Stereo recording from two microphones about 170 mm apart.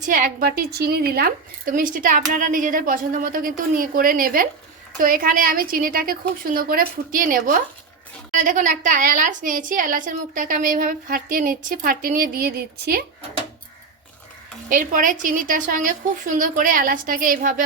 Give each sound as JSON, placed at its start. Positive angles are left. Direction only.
{"t": 0.0, "sound": "a woman's voice", "side_deg": -50}
{"t": 14.7, "sound": "a woman's voice", "side_deg": -55}